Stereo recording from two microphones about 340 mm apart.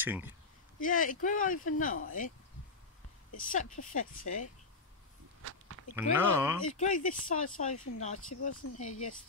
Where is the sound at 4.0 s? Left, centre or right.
Left.